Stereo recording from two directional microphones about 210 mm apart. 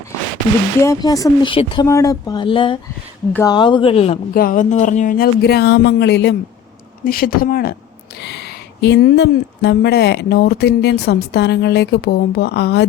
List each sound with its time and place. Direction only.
0.8 s speech: 15° left (ahead or behind)
4.4 s speech: 40° left (ahead or behind)